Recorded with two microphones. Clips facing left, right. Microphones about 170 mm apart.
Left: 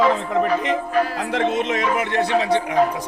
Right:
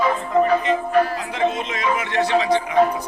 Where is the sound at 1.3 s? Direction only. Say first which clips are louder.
Left 3 dB; 65° left (ahead or behind).